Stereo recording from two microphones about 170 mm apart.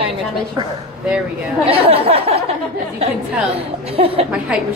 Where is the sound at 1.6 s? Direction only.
35° right (ahead or behind).